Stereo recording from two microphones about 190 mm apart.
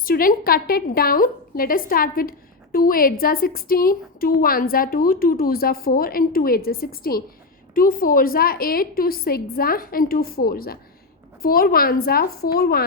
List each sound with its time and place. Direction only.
0.0 s a woman's voice: 50° left (ahead or behind)